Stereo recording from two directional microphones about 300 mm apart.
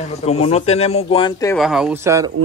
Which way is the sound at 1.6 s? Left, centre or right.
Centre.